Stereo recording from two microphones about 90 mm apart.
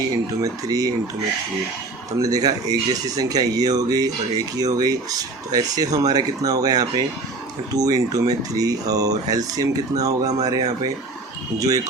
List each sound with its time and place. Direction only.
0.4 s speech: 40° right (ahead or behind)
2.1 s speech: 45° right (ahead or behind)